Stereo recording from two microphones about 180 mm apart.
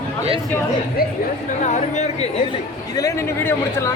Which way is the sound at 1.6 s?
40° left (ahead or behind).